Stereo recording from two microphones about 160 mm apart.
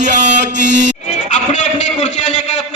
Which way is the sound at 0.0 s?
50° right (ahead or behind).